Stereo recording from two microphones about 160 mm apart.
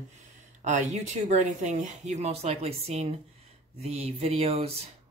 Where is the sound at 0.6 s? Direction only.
45° right (ahead or behind).